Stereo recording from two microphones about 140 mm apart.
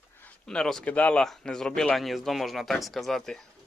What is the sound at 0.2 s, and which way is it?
Speech, 10° left (ahead or behind).